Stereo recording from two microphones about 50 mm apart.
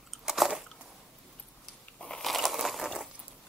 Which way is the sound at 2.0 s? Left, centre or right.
Centre.